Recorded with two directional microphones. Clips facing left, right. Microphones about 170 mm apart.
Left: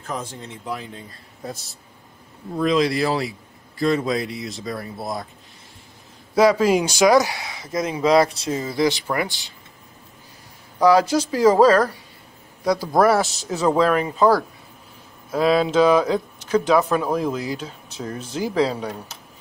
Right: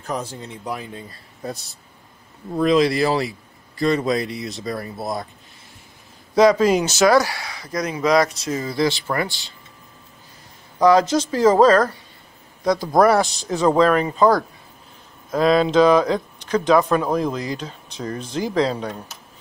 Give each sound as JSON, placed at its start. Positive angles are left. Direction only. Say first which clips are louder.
{"t": 1.4, "sound": "a man's voice", "louder": "right 3 dB", "side_deg": 0}
{"t": 6.3, "sound": "speech", "louder": "right 1 dB", "side_deg": 10}
{"t": 10.8, "sound": "a man's voice", "louder": "right 1 dB", "side_deg": 10}